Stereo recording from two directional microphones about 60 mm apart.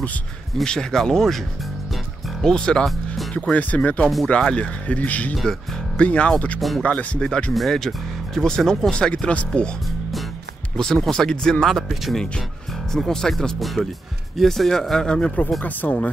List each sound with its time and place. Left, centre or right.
0.7 s a man's voice: centre
2.4 s a man's voice: centre
5.3 s a man's voice: centre
5.9 s a man's voice: centre
7.5 s a man's voice: centre
11.1 s a man's voice: centre
11.6 s a man's voice: centre
15.6 s speech: left